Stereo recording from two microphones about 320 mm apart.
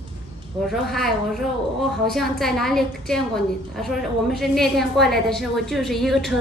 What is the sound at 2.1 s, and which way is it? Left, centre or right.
A woman's voice, centre.